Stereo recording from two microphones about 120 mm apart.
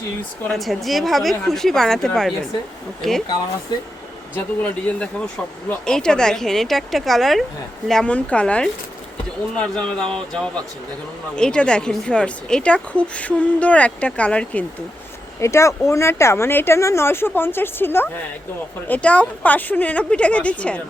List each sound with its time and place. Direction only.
0.4 s speech: centre (ahead or behind)
4.9 s speech: 10° left (ahead or behind)
15.4 s speech: 25° left (ahead or behind)